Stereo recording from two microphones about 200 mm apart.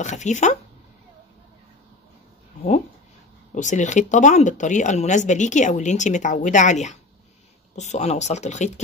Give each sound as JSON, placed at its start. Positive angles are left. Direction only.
{"t": 0.0, "sound": "speech", "side_deg": 35}
{"t": 3.5, "sound": "speech", "side_deg": 35}